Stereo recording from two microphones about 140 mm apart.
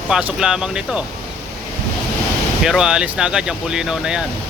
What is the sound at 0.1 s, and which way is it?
Speech, 5° right (ahead or behind).